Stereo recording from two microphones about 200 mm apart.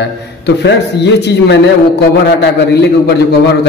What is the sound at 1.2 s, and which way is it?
Speech, 60° left (ahead or behind).